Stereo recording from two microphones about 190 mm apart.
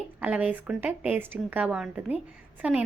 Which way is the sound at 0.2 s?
5° right (ahead or behind).